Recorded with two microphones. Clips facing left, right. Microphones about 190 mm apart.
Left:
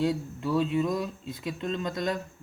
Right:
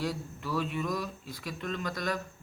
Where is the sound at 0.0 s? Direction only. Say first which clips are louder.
Left 7 dB; 25° left (ahead or behind).